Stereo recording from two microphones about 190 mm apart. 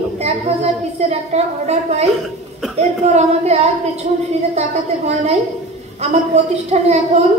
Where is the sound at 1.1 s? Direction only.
35° right (ahead or behind).